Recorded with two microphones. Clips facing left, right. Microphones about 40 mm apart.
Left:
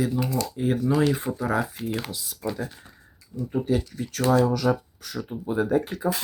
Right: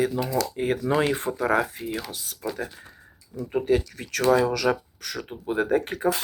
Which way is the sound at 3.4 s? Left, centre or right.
Right.